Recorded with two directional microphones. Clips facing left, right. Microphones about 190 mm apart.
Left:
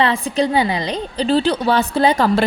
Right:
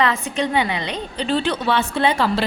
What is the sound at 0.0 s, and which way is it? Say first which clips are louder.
A woman's voice: left 3 dB; 30° left (ahead or behind).